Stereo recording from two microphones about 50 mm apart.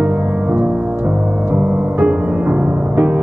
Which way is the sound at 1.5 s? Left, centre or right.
Right.